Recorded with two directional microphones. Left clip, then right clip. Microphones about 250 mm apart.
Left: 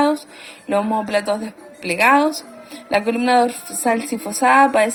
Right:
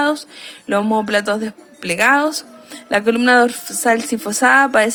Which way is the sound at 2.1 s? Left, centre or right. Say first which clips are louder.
Even; right.